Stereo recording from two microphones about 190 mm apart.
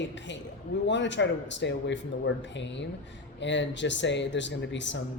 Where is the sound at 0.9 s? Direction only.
70° left (ahead or behind).